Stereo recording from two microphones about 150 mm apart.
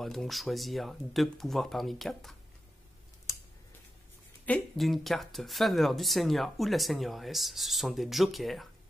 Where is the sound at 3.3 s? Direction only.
20° left (ahead or behind).